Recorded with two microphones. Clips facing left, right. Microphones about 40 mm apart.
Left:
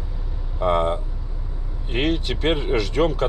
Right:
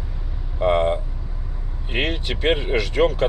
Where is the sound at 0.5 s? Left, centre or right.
Right.